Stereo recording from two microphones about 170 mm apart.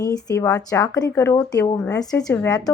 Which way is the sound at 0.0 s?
20° left (ahead or behind).